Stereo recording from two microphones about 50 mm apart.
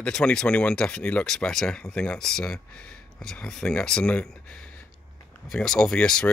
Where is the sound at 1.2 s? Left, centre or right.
Centre.